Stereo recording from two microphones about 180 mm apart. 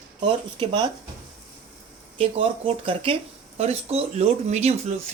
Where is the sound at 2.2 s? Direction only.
30° right (ahead or behind).